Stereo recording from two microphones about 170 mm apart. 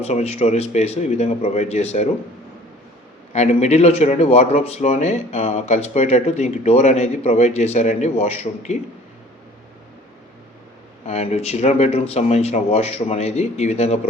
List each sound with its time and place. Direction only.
0.0 s speech: 40° left (ahead or behind)
3.3 s speech: 40° left (ahead or behind)
11.0 s speech: 40° left (ahead or behind)